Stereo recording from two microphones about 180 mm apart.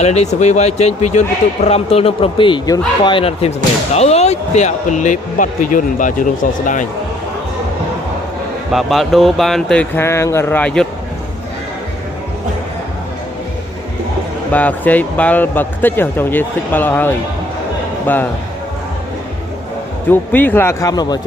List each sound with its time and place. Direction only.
0.0 s speech: 35° left (ahead or behind)
8.7 s speech: centre (ahead or behind)
14.5 s speech: 10° left (ahead or behind)
20.1 s speech: 10° left (ahead or behind)